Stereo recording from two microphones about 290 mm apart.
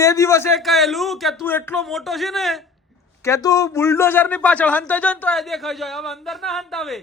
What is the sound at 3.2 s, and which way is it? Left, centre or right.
A man's voice, centre.